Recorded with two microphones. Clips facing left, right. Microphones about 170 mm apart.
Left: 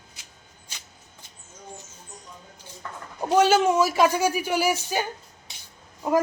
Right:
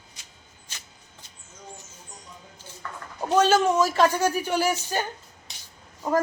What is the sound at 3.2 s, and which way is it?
A woman's voice, 10° left (ahead or behind).